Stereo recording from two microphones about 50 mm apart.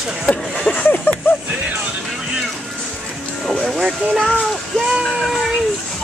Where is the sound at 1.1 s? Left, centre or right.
Left.